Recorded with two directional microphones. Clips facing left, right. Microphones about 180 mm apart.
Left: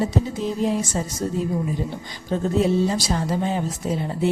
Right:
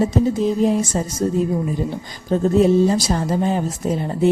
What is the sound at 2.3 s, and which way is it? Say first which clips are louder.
A woman's voice: right 5 dB; 45° right (ahead or behind).